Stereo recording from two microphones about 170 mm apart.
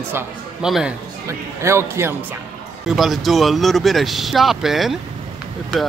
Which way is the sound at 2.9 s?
Centre (ahead or behind).